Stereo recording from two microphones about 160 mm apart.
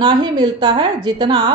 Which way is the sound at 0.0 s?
30° right (ahead or behind).